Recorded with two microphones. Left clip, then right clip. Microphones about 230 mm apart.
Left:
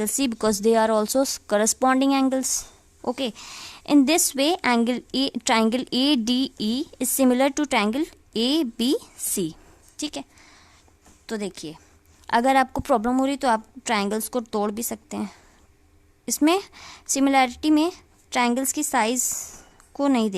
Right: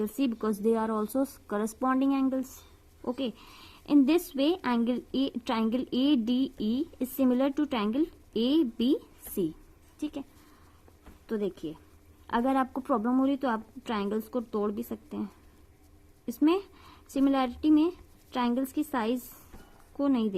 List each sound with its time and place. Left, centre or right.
0.0 s a woman's voice: left
11.3 s a woman's voice: left